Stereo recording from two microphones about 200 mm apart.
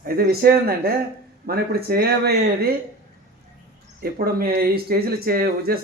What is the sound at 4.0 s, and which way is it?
Speech, 50° right (ahead or behind).